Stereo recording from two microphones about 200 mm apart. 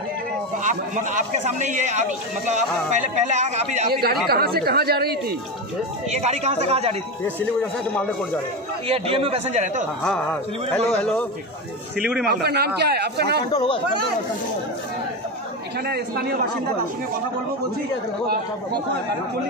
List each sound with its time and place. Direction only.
0.7 s a man's voice: 40° right (ahead or behind)
3.9 s speech: 50° right (ahead or behind)
6.0 s a man's voice: 35° right (ahead or behind)
8.8 s a man's voice: 30° right (ahead or behind)
10.0 s a man's voice: 5° left (ahead or behind)
12.3 s speech: 55° right (ahead or behind)
13.5 s speech: 25° left (ahead or behind)